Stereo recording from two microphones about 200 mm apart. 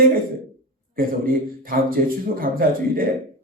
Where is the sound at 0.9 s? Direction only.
45° right (ahead or behind).